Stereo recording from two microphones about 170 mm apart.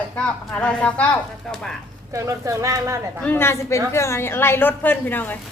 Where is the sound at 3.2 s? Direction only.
10° left (ahead or behind).